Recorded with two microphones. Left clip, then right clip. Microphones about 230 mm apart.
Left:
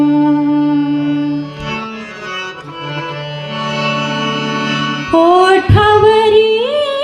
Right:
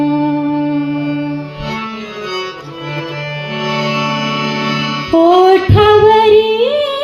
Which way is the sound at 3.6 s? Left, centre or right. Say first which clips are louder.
Right 1 dB; right.